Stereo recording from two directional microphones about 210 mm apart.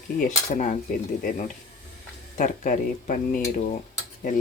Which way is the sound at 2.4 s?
35° left (ahead or behind).